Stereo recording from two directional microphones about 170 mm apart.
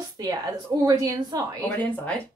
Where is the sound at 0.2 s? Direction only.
20° right (ahead or behind).